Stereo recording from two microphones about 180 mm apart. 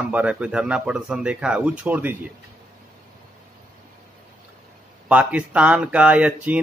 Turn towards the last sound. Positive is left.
turn(degrees=-10)  # may be behind; listen again after turning